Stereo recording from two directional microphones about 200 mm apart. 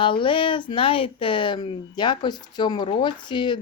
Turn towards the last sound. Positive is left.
turn(degrees=25)  # may be behind; listen again after turning